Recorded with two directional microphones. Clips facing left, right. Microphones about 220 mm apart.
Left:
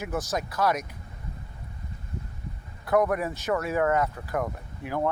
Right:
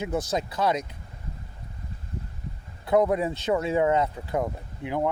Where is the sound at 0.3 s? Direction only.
25° right (ahead or behind).